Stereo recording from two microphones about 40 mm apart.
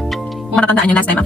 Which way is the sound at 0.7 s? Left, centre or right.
Left.